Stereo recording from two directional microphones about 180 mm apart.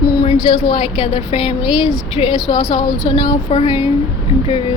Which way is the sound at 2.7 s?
20° left (ahead or behind).